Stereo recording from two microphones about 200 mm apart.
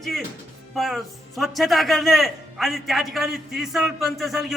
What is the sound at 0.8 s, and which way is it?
A man's voice, centre (ahead or behind).